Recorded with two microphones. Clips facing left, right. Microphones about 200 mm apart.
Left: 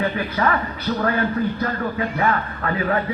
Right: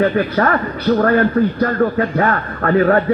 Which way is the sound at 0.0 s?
50° right (ahead or behind).